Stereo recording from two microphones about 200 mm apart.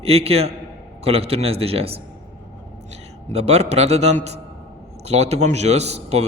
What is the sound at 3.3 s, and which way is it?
A man's voice, 30° right (ahead or behind).